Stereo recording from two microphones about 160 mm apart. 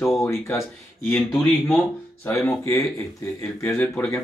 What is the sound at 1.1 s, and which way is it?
Speech, centre (ahead or behind).